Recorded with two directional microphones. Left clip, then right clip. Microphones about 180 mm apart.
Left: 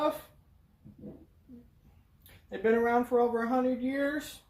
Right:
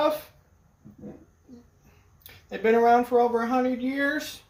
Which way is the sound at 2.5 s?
30° right (ahead or behind).